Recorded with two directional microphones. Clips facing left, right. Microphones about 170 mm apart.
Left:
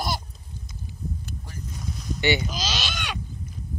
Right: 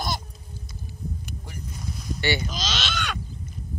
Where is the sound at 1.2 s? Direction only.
15° right (ahead or behind).